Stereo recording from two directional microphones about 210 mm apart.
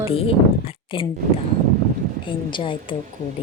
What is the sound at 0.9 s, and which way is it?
Speech, 25° left (ahead or behind).